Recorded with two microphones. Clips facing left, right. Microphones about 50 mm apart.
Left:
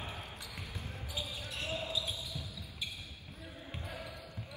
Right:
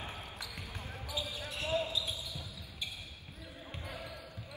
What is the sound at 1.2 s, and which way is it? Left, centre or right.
Basketball bounce, right.